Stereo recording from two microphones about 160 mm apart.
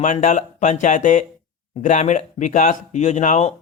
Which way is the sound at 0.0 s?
50° left (ahead or behind).